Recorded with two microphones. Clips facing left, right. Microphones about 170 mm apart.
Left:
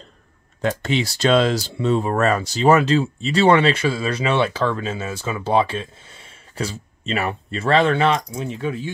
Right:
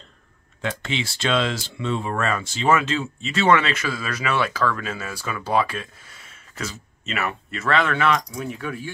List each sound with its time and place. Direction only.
0.6 s speech: 40° left (ahead or behind); by 8.9 s 25° left (ahead or behind)